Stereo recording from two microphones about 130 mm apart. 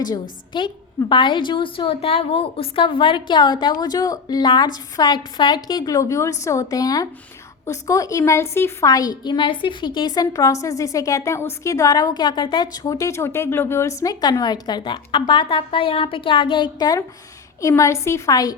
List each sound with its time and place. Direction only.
0.0 s a woman's voice: 35° left (ahead or behind)
10.3 s a woman's voice: 25° left (ahead or behind)